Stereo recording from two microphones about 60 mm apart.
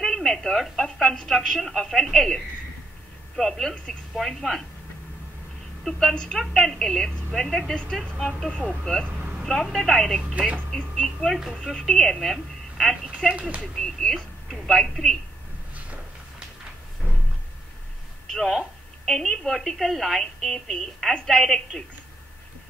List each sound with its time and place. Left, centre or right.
0.0 s telephone: centre
1.0 s a woman's voice: centre
5.9 s a woman's voice: centre
9.0 s a sound: right
9.4 s a woman's voice: centre
18.3 s a woman's voice: centre